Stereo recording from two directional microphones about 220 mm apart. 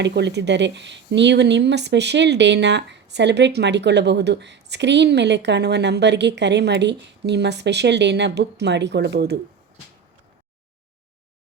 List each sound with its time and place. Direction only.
0.0 s speech: 50° right (ahead or behind)